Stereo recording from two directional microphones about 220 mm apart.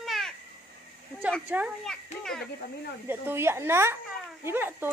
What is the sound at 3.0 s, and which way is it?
A woman's voice, 10° right (ahead or behind).